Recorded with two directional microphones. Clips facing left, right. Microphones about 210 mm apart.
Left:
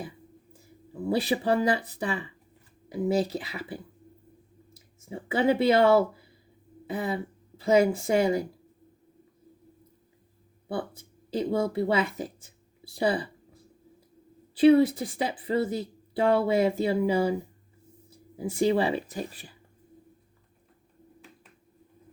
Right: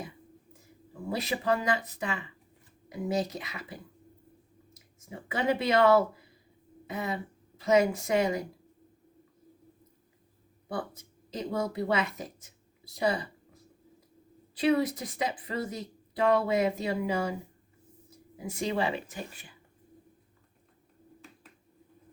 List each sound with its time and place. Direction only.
1.1 s a woman's voice: 30° left (ahead or behind)
10.7 s speech: 30° left (ahead or behind)